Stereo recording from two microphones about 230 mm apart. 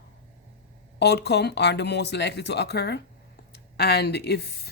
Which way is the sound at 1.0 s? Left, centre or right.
Left.